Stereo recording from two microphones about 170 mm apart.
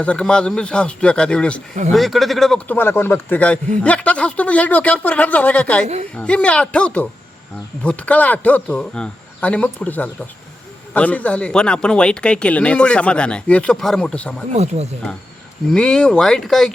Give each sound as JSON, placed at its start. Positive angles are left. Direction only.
{"t": 0.0, "sound": "speech", "side_deg": 5}
{"t": 14.5, "sound": "speech", "side_deg": -40}
{"t": 15.7, "sound": "speech", "side_deg": 5}